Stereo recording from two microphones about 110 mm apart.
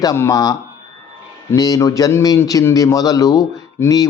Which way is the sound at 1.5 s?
30° left (ahead or behind).